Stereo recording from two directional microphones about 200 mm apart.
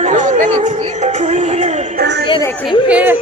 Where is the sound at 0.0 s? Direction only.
40° right (ahead or behind).